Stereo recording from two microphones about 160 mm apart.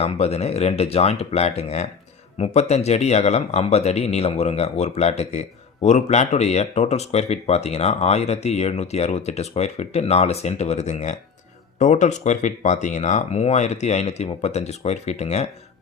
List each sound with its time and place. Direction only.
0.0 s speech: 40° left (ahead or behind)